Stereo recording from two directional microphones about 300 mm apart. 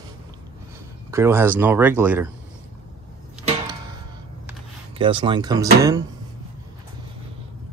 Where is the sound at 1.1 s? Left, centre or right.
Centre.